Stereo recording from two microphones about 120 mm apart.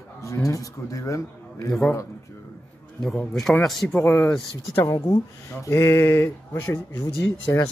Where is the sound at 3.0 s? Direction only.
5° left (ahead or behind).